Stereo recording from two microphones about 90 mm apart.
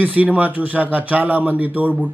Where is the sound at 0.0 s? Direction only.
15° right (ahead or behind).